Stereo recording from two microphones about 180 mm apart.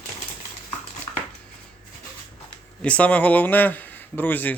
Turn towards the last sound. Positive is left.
turn(degrees=10)  # may be behind; listen again after turning